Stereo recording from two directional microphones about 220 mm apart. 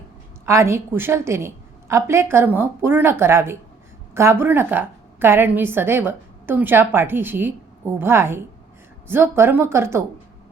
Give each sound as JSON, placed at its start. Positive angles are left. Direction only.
{"t": 0.4, "sound": "a woman's voice", "side_deg": -15}